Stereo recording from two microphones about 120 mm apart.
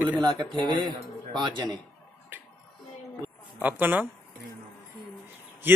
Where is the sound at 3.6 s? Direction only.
15° right (ahead or behind).